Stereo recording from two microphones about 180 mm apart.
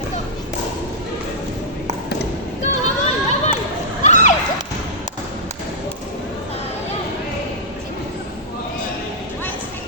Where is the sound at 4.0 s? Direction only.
40° left (ahead or behind).